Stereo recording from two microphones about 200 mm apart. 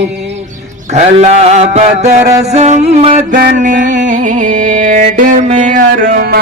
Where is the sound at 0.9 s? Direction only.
35° right (ahead or behind).